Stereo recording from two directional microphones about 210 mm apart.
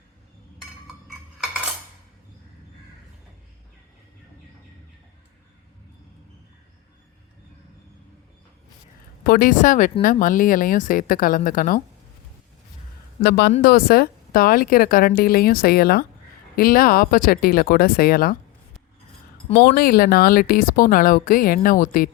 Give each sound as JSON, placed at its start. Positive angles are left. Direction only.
{"t": 9.2, "sound": "a woman's voice", "side_deg": 45}
{"t": 13.2, "sound": "speech", "side_deg": 50}
{"t": 19.5, "sound": "speech", "side_deg": 45}